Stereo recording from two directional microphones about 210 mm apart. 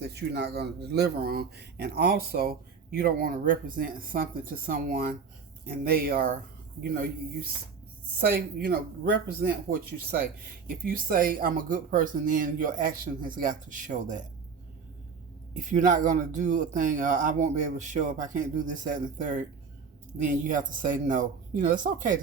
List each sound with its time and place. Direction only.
0.1 s speech: 55° right (ahead or behind)
8.2 s speech: 50° right (ahead or behind)
15.5 s speech: 40° right (ahead or behind)